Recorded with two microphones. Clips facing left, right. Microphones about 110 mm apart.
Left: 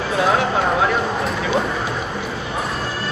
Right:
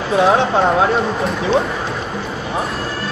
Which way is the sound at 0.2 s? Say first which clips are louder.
Right 4 dB; 25° right (ahead or behind).